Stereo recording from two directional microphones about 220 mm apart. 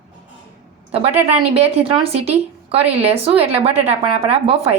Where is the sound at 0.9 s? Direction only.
25° right (ahead or behind).